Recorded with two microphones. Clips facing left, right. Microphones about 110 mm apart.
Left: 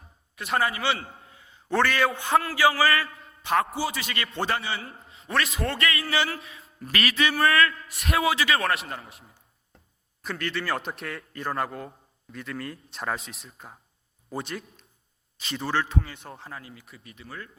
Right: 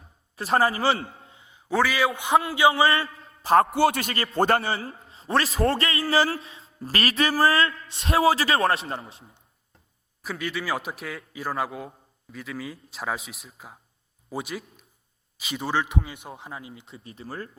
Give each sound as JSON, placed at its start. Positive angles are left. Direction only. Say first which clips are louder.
{"t": 0.3, "sound": "a man's voice", "louder": "right 4 dB", "side_deg": -35}
{"t": 1.3, "sound": "a sound", "louder": "even", "side_deg": -20}
{"t": 1.7, "sound": "a man's voice", "louder": "even", "side_deg": -5}
{"t": 2.2, "sound": "a man's voice", "louder": "right 3 dB", "side_deg": -20}
{"t": 3.7, "sound": "a man's voice", "louder": "right 8 dB", "side_deg": -65}
{"t": 4.0, "sound": "a man's voice", "louder": "right 3 dB", "side_deg": -35}
{"t": 4.4, "sound": "a man's voice", "louder": "right 8 dB", "side_deg": -45}
{"t": 4.7, "sound": "a man's voice", "louder": "right 4 dB", "side_deg": -35}
{"t": 10.2, "sound": "a man's voice", "louder": "even", "side_deg": -5}